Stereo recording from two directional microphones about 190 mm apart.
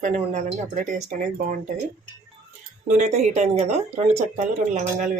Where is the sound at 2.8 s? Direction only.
35° right (ahead or behind).